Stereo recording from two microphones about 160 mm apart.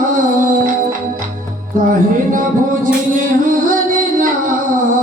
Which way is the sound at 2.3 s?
55° right (ahead or behind).